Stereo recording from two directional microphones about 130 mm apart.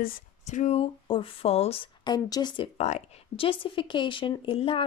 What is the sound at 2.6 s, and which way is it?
Speech, 60° left (ahead or behind).